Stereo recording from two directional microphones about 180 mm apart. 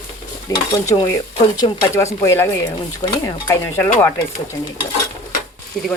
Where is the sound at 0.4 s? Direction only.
20° left (ahead or behind).